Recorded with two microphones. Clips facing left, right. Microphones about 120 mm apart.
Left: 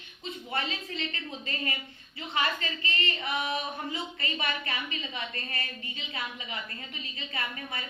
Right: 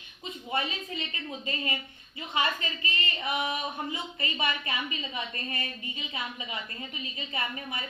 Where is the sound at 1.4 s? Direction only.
20° right (ahead or behind).